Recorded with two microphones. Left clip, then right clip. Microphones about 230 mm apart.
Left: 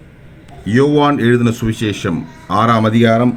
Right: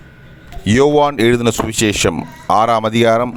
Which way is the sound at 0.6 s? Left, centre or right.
Right.